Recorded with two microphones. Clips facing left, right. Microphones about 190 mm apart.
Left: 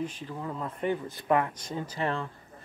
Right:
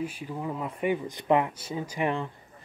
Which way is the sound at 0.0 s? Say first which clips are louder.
Right 2 dB; 10° right (ahead or behind).